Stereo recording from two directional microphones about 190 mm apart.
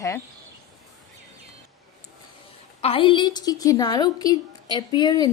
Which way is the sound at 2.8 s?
30° left (ahead or behind).